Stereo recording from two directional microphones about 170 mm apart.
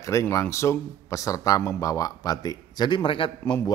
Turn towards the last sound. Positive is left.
turn(degrees=30)  # may be behind; listen again after turning